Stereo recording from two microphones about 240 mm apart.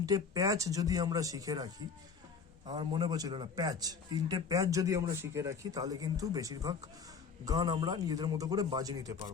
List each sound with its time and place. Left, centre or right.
0.0 s a man's voice: centre